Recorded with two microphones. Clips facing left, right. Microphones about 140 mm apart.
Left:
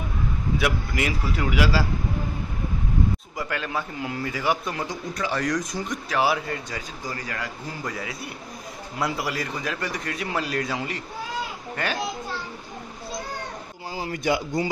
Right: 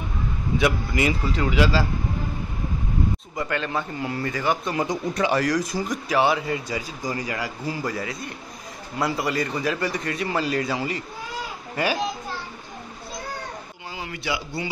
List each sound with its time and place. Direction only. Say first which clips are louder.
0.6 s a man's voice: right 4 dB; centre (ahead or behind)
3.3 s a man's voice: right 5 dB; 5° left (ahead or behind)
4.7 s speech: right 6 dB; 20° right (ahead or behind)
5.4 s a man's voice: right 3 dB; centre (ahead or behind)
13.9 s speech: left 5 dB; 40° left (ahead or behind)